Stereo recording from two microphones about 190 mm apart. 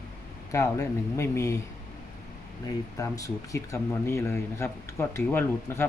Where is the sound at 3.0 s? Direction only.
15° left (ahead or behind).